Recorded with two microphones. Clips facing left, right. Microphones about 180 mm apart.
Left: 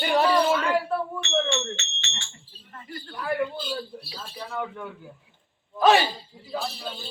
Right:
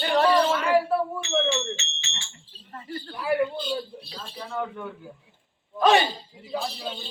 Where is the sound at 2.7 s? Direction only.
35° right (ahead or behind).